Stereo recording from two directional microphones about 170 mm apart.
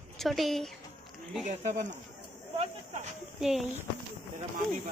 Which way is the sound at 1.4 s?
45° right (ahead or behind).